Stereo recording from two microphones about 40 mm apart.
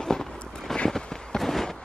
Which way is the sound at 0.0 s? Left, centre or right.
Centre.